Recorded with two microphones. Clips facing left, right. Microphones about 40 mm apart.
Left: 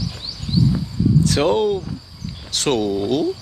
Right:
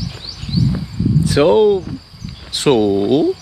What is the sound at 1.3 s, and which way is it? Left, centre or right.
Speech, centre.